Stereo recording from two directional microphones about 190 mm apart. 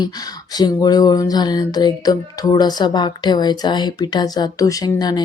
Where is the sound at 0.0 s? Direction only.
20° left (ahead or behind).